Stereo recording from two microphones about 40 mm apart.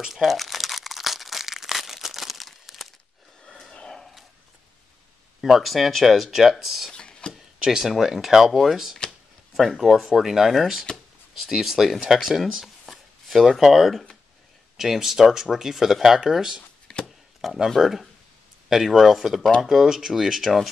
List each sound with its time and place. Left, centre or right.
0.1 s crumpling: centre
5.4 s speech: centre
6.9 s chopping: centre
7.3 s a sound: centre
8.0 s speech: centre
9.0 s a sound: centre
9.5 s speech: centre
9.8 s speech: centre
12.6 s a sound: centre
14.8 s speech: centre
16.9 s chopping: left
17.6 s speech: centre